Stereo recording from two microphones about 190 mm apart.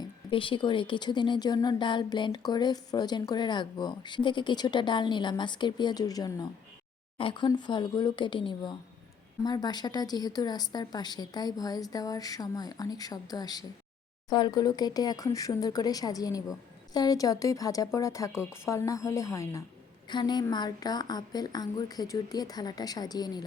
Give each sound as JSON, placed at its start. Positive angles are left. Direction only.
{"t": 0.0, "sound": "speech", "side_deg": 25}